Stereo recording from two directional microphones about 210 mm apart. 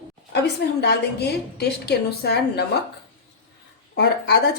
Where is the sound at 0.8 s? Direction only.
50° left (ahead or behind).